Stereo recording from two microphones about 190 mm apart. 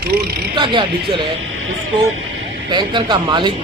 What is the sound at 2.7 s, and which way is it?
Speech, 25° right (ahead or behind).